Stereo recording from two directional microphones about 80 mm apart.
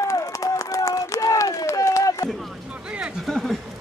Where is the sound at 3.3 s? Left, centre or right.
Centre.